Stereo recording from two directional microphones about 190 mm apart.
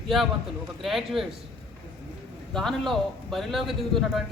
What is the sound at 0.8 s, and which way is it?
Speech, centre (ahead or behind).